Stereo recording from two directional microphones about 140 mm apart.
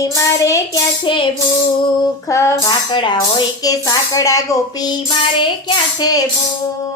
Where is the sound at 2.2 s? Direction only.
20° left (ahead or behind).